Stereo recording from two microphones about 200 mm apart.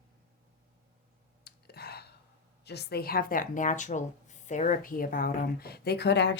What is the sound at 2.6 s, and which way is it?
A woman's voice, 55° left (ahead or behind).